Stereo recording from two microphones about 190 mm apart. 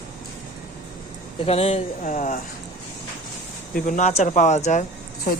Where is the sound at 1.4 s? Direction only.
30° left (ahead or behind).